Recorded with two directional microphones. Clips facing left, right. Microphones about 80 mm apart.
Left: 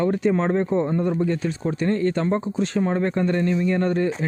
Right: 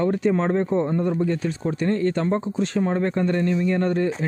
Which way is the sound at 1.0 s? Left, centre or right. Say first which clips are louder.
Even; left.